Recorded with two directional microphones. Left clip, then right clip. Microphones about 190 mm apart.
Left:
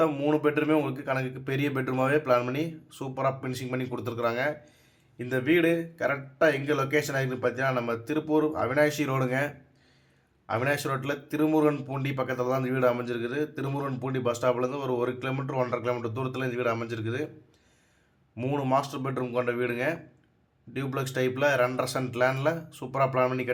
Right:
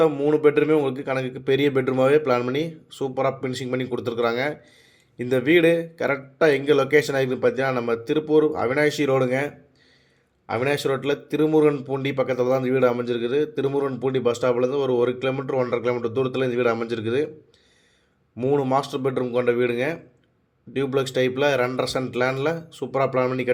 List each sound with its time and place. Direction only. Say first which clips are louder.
0.0 s a man's voice: right 7 dB; 5° right (ahead or behind)
18.3 s a man's voice: right 6 dB; 10° right (ahead or behind)